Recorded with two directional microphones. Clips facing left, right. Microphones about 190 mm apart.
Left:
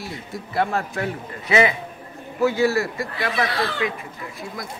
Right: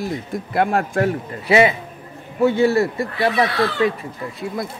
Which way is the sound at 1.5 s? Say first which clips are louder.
Right 4 dB; 30° right (ahead or behind).